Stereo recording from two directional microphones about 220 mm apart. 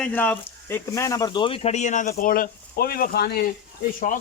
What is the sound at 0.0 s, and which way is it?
Speech, 5° left (ahead or behind).